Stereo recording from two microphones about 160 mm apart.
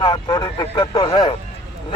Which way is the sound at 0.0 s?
25° left (ahead or behind).